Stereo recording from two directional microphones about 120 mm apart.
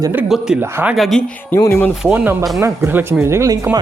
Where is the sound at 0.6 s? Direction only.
20° right (ahead or behind).